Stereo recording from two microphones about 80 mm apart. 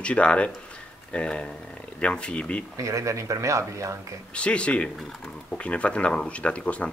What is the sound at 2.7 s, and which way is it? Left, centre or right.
Speech, right.